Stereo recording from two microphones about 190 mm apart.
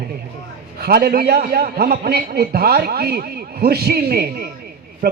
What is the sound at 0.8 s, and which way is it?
A man's voice, 55° right (ahead or behind).